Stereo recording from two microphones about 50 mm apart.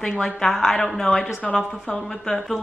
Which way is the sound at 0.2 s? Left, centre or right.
Centre.